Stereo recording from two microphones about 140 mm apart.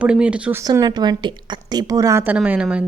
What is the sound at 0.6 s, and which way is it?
A woman's voice, 25° right (ahead or behind).